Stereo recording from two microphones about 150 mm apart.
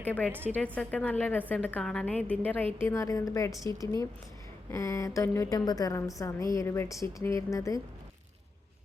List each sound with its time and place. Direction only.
0.1 s a woman's voice: 10° left (ahead or behind)